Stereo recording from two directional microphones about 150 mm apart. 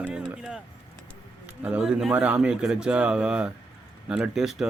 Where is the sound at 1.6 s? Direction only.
5° right (ahead or behind).